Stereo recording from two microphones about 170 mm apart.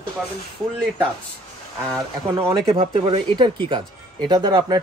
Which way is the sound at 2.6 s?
35° right (ahead or behind).